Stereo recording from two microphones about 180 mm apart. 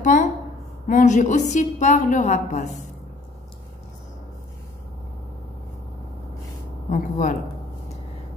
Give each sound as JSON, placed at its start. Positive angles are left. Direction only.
{"t": 0.1, "sound": "a woman's voice", "side_deg": 45}
{"t": 6.9, "sound": "a woman's voice", "side_deg": 45}